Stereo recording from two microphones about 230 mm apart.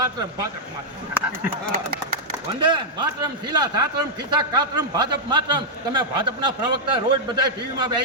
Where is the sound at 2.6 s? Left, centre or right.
Centre.